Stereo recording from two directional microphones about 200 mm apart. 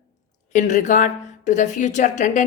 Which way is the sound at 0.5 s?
35° left (ahead or behind).